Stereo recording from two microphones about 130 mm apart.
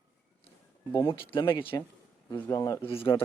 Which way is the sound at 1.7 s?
25° left (ahead or behind).